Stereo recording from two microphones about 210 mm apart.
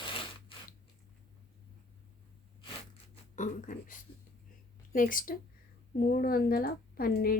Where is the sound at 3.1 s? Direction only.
35° left (ahead or behind).